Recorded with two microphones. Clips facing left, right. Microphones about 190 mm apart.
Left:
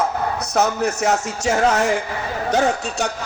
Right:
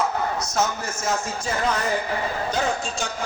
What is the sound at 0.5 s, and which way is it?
Speech, 65° left (ahead or behind).